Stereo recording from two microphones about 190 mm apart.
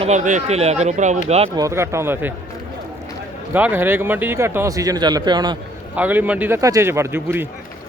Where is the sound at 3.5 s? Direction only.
10° right (ahead or behind).